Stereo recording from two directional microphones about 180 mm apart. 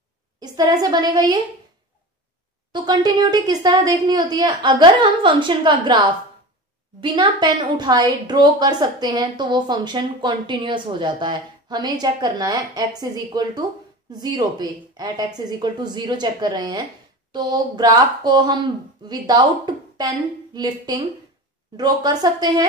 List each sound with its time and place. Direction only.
0.4 s a woman's voice: 20° right (ahead or behind)
2.7 s a woman's voice: 25° right (ahead or behind)
7.0 s a woman's voice: 25° right (ahead or behind)